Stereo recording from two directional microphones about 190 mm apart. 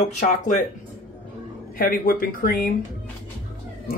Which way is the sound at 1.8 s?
50° left (ahead or behind).